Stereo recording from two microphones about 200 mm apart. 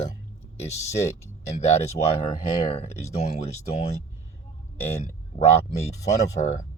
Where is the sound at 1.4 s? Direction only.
35° left (ahead or behind).